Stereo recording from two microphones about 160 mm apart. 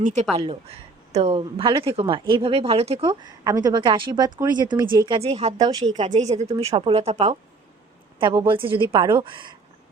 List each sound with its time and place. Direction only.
0.0 s speech: 45° right (ahead or behind)
3.1 s a woman's voice: 25° right (ahead or behind); by 5.7 s 40° right (ahead or behind)
5.7 s a woman's voice: 25° right (ahead or behind)
6.1 s speech: 45° right (ahead or behind)
8.2 s a woman's voice: 30° right (ahead or behind)